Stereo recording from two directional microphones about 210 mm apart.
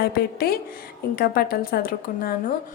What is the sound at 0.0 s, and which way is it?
A woman's voice, 45° left (ahead or behind).